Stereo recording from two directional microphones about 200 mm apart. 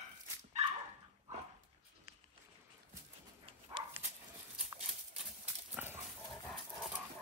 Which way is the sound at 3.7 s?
25° right (ahead or behind).